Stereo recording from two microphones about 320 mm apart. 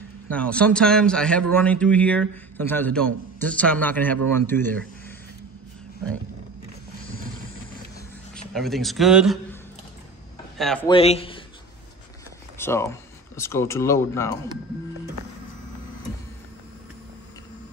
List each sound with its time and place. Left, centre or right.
0.3 s a man's voice: centre
8.4 s a man's voice: centre
10.6 s a man's voice: centre
10.9 s speech: centre
12.5 s speech: centre